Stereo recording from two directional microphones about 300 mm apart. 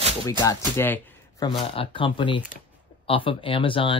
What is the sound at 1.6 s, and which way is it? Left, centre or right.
Speech, centre.